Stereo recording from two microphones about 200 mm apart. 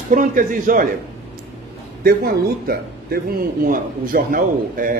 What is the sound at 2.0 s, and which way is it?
A man's voice, 50° right (ahead or behind).